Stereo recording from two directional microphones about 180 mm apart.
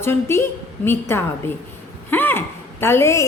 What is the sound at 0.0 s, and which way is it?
A woman's voice, 15° left (ahead or behind).